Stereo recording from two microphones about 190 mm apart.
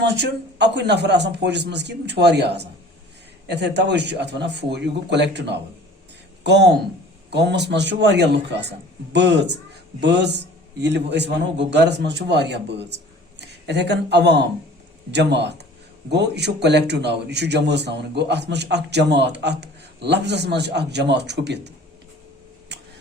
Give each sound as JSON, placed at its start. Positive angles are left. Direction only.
{"t": 0.0, "sound": "a man's voice", "side_deg": -60}